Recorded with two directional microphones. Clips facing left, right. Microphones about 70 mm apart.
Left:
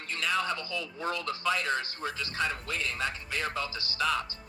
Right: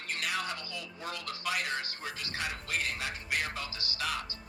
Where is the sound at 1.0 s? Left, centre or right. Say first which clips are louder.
Left 7 dB; left.